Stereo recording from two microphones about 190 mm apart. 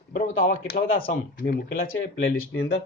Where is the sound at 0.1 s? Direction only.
45° left (ahead or behind).